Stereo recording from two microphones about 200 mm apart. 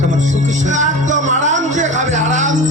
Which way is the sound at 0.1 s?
35° right (ahead or behind).